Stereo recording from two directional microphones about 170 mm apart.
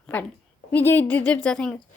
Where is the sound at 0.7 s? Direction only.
10° left (ahead or behind).